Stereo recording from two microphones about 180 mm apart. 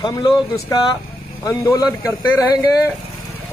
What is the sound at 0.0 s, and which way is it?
Speech, 25° left (ahead or behind).